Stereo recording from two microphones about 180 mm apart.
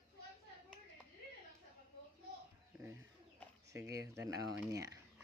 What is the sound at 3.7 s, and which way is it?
Speech, 15° right (ahead or behind).